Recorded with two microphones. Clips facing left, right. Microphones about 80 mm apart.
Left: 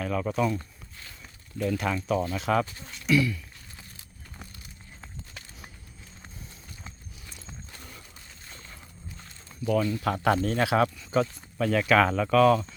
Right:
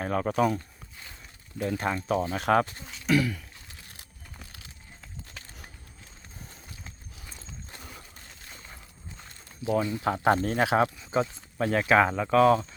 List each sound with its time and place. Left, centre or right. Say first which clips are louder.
0.0 s speech: right 2 dB; right
1.6 s speech: left 1 dB; right
7.3 s clip-clop: right 1 dB; right
9.8 s speech: right 1 dB; right
11.6 s speech: even; right